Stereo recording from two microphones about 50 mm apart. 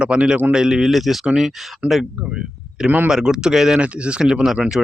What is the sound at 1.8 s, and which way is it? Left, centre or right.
Speech, right.